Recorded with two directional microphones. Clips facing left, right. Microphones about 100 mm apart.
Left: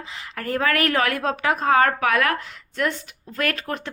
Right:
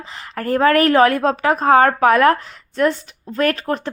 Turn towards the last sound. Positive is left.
turn(degrees=-30)  # may be behind; listen again after turning